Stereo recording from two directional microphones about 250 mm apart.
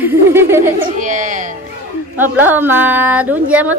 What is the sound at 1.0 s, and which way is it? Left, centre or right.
Speech, right.